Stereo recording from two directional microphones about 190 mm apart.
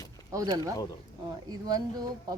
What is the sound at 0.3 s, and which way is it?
Speech, 20° right (ahead or behind).